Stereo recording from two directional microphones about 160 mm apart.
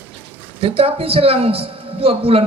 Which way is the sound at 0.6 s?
35° right (ahead or behind).